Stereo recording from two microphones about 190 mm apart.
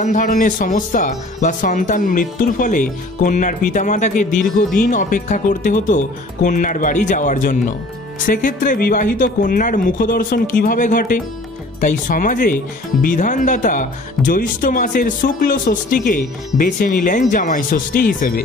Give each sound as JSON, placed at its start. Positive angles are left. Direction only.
{"t": 0.0, "sound": "speech", "side_deg": 40}